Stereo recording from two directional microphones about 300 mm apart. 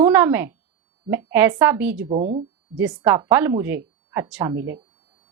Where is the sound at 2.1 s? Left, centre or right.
Right.